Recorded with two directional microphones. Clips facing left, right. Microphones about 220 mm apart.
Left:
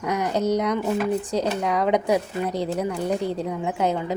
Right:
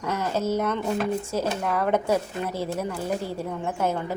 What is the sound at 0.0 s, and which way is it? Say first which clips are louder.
Speech: left 3 dB; 15° left (ahead or behind).